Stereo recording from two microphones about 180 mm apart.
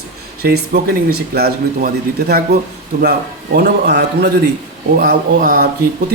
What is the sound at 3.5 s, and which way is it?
Speech, 70° right (ahead or behind).